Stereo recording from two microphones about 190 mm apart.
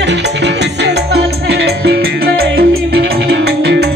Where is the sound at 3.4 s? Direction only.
60° right (ahead or behind).